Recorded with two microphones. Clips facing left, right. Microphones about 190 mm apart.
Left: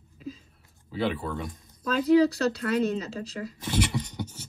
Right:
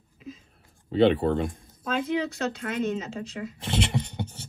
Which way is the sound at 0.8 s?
65° right (ahead or behind).